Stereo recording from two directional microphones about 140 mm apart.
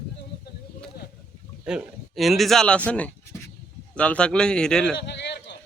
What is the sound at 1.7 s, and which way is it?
A man's voice, 5° right (ahead or behind).